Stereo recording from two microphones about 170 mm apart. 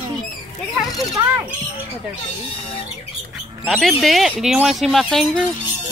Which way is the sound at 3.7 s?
Centre (ahead or behind).